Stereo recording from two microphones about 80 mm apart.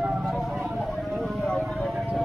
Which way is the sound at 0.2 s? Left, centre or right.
Centre.